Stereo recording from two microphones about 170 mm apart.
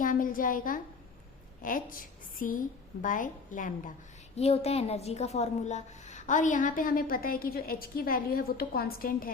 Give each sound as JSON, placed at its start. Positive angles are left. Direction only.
{"t": 0.0, "sound": "a woman's voice", "side_deg": 55}
{"t": 4.4, "sound": "a woman's voice", "side_deg": 40}